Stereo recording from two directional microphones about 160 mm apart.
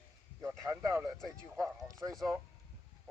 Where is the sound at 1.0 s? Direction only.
Centre (ahead or behind).